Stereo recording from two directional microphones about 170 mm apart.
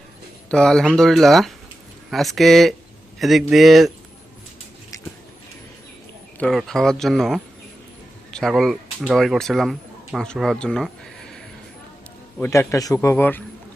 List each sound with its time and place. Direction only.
0.4 s speech: 5° left (ahead or behind)
6.4 s speech: centre (ahead or behind)
12.4 s a man's voice: 20° left (ahead or behind)